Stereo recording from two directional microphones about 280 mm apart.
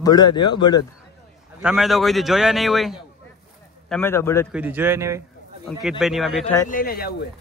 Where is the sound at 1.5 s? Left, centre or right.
Centre.